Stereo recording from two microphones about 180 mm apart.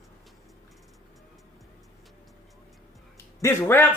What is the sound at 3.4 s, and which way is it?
Speech, 10° left (ahead or behind).